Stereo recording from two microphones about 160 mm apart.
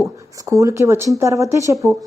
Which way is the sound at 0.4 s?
20° right (ahead or behind).